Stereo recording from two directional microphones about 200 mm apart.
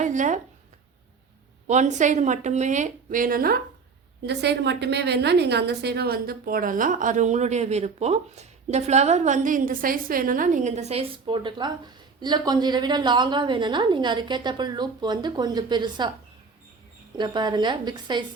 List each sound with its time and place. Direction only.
0.0 s speech: 40° right (ahead or behind)
1.6 s a woman's voice: 35° right (ahead or behind)
4.3 s a woman's voice: 60° right (ahead or behind); by 16.0 s 20° right (ahead or behind)
17.2 s a woman's voice: 20° right (ahead or behind)